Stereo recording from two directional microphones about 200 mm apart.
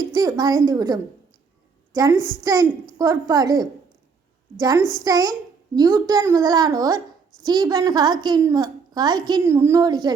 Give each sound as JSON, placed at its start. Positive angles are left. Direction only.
{"t": 0.0, "sound": "a woman's voice", "side_deg": -15}